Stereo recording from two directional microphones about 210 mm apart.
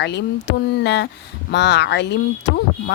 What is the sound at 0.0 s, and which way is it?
Speech, 55° left (ahead or behind).